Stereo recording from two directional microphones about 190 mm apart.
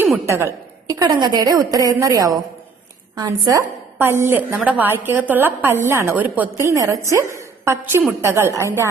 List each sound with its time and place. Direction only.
0.3 s a woman's voice: 15° right (ahead or behind)